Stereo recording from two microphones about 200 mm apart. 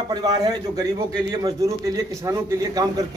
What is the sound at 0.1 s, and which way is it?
Speech, 20° right (ahead or behind).